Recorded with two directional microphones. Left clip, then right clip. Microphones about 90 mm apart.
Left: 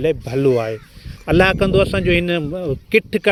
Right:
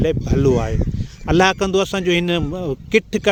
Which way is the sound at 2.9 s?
20° right (ahead or behind).